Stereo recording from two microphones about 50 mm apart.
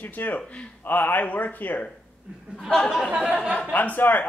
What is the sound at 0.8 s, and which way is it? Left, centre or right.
Speech, left.